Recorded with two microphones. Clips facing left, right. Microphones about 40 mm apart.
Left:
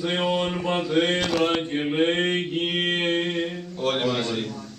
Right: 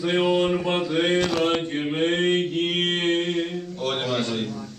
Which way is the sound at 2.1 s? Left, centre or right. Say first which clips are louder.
Right 2 dB; left.